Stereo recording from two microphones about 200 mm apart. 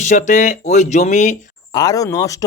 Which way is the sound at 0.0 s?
35° left (ahead or behind).